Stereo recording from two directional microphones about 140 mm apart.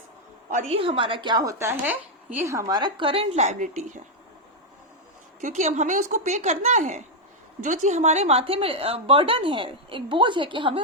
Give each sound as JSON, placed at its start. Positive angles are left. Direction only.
{"t": 0.7, "sound": "a woman's voice", "side_deg": -40}
{"t": 5.4, "sound": "a woman's voice", "side_deg": -60}